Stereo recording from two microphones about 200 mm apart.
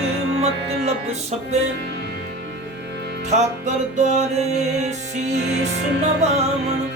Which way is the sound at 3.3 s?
35° right (ahead or behind).